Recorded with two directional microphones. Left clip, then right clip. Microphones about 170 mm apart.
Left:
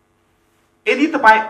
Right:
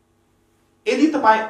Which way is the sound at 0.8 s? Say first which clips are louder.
Left 4 dB; 20° left (ahead or behind).